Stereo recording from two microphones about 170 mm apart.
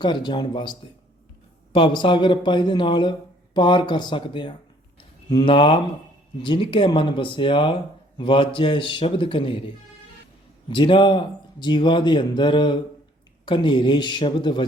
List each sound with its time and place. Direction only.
0.0 s a man's voice: 25° left (ahead or behind)